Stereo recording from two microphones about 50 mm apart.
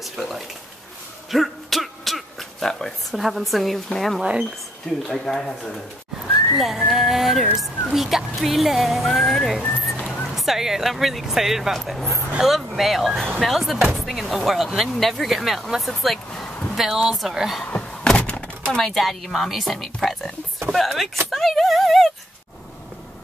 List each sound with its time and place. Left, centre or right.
0.0 s speech: centre
1.3 s throat clearing: centre
3.2 s speech: centre
4.2 s speech: centre
4.8 s speech: centre
6.5 s speech: centre
10.3 s speech: centre
18.1 s thunk: centre
18.4 s speech: centre
21.3 s a sound: centre